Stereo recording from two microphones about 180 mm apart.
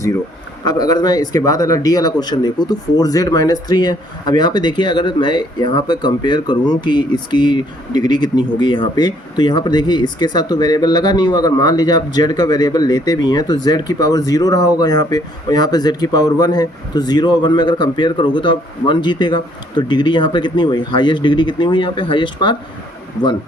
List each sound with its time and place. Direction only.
0.6 s speech: 20° left (ahead or behind)